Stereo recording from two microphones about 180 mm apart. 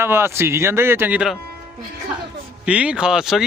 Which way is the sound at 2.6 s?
5° right (ahead or behind).